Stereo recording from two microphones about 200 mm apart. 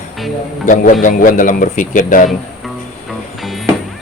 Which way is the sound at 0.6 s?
40° left (ahead or behind).